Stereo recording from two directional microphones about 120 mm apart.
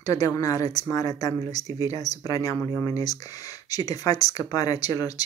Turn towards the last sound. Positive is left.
turn(degrees=30)  # may be behind; listen again after turning